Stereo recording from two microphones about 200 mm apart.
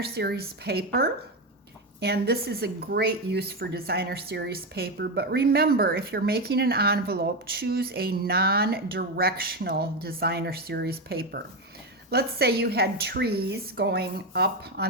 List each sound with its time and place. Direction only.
0.0 s speech: 50° right (ahead or behind)